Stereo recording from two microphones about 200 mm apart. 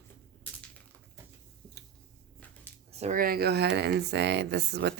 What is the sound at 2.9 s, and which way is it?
Speech, 35° right (ahead or behind).